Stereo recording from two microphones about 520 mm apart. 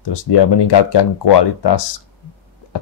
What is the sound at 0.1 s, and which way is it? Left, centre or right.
Speech, left.